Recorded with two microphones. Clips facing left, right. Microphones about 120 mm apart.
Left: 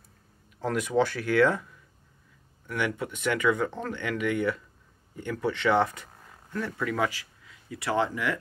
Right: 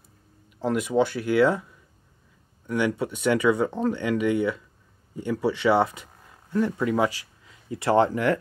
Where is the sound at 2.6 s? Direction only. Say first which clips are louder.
Right 5 dB; 20° right (ahead or behind); by 8.4 s 40° right (ahead or behind).